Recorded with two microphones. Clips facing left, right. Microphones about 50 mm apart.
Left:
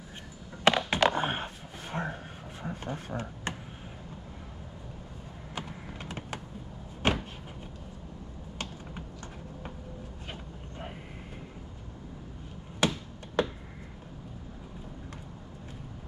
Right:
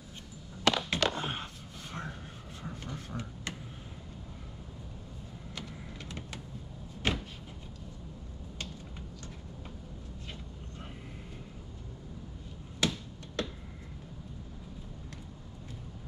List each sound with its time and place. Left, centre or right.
0.7 s music: left
1.1 s a sound: left
5.5 s vehicle: left